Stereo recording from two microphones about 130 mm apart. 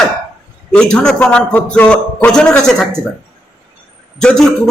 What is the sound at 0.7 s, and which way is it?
A man's voice, 5° left (ahead or behind).